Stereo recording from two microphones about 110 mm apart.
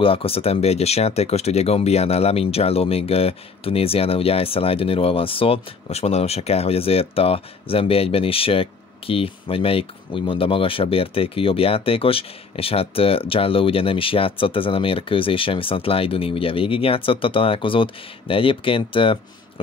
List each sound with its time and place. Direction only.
0.0 s speech: 60° left (ahead or behind)